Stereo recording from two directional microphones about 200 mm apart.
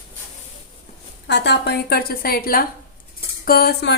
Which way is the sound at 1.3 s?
60° left (ahead or behind).